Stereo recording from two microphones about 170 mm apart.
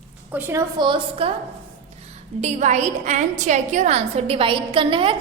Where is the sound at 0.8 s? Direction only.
30° right (ahead or behind).